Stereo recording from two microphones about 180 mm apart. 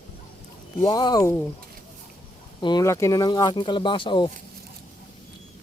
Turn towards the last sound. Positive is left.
turn(degrees=25)  # may be behind; listen again after turning